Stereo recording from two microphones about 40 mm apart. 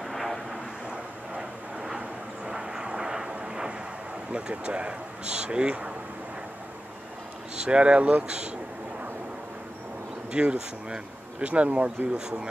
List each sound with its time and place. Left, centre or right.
0.0 s vehicle: centre
0.8 s vehicle: centre
4.3 s speech: right
7.6 s speech: right
10.3 s speech: right